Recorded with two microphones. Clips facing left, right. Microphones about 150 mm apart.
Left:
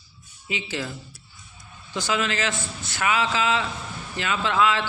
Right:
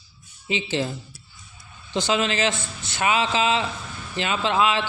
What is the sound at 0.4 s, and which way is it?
A man's voice, 25° right (ahead or behind).